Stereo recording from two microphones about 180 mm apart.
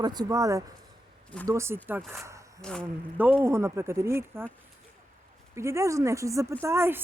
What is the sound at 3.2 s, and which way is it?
Speech, 10° right (ahead or behind).